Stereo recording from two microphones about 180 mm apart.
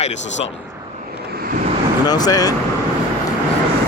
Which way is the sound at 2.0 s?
20° left (ahead or behind).